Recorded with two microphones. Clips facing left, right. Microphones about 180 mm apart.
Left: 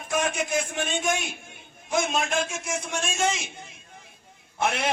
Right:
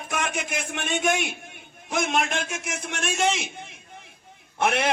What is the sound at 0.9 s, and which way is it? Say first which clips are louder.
A man's voice: right 5 dB; 65° right (ahead or behind).